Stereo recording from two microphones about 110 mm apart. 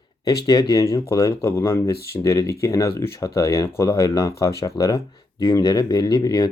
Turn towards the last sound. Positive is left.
turn(degrees=35)  # may be behind; listen again after turning